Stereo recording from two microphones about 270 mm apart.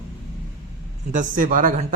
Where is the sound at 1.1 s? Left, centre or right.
Right.